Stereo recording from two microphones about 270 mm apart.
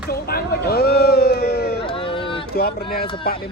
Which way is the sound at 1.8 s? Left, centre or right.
Centre.